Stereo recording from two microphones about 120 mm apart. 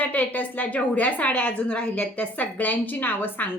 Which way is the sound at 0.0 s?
15° left (ahead or behind).